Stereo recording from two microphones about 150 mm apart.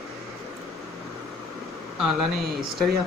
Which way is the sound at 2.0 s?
Centre (ahead or behind).